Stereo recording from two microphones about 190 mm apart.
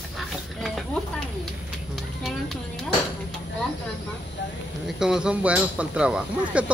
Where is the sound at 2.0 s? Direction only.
Centre (ahead or behind).